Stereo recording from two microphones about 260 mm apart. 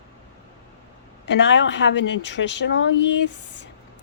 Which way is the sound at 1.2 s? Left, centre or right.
Left.